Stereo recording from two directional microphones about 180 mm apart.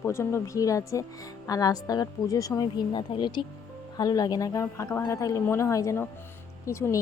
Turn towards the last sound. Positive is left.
turn(degrees=15)  # may be behind; listen again after turning